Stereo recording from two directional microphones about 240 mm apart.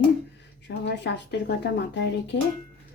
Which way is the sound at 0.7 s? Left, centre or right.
Left.